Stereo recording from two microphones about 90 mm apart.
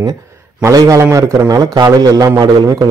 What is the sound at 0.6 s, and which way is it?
A man's voice, 35° right (ahead or behind).